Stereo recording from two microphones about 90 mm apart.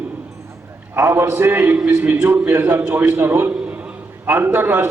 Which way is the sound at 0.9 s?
30° right (ahead or behind).